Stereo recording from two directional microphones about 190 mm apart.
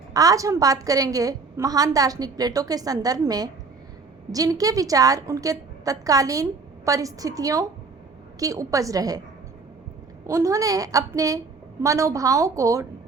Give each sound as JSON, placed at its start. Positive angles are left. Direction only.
{"t": 0.1, "sound": "a woman's voice", "side_deg": -20}
{"t": 10.2, "sound": "a woman's voice", "side_deg": -15}